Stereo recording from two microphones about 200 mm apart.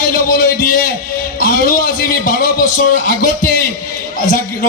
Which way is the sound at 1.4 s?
45° left (ahead or behind).